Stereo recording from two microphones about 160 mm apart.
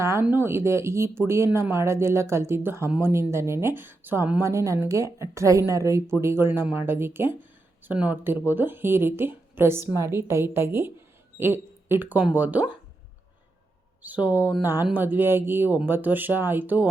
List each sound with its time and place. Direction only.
0.0 s speech: 15° right (ahead or behind)
14.0 s speech: 10° right (ahead or behind)